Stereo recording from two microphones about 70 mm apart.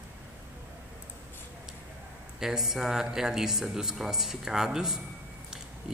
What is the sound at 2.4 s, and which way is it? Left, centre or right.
Speech, centre.